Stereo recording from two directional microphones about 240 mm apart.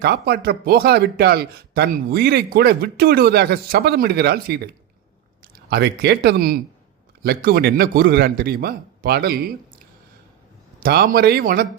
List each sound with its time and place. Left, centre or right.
0.0 s speech: right
5.7 s speech: right